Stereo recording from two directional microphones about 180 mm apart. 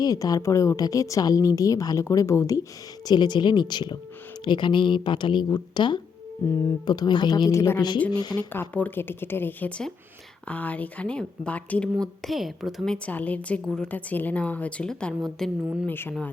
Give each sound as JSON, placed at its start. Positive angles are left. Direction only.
{"t": 0.0, "sound": "speech", "side_deg": 20}
{"t": 8.7, "sound": "a woman's voice", "side_deg": 10}